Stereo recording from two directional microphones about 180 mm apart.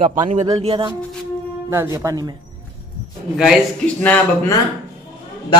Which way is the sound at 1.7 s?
15° right (ahead or behind).